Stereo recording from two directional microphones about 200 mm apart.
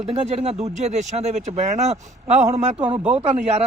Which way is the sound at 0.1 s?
30° right (ahead or behind).